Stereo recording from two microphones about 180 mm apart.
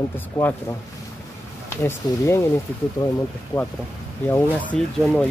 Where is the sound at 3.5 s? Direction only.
20° left (ahead or behind).